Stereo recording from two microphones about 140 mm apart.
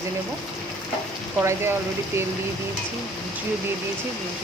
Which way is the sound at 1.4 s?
20° right (ahead or behind).